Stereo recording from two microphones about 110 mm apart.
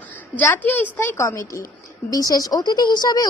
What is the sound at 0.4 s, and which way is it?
A woman's voice, 15° left (ahead or behind).